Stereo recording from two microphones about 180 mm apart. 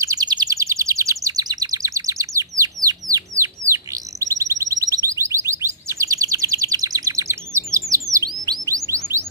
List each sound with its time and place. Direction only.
0.0 s bird: 20° right (ahead or behind)
8.2 s chirp: 20° right (ahead or behind)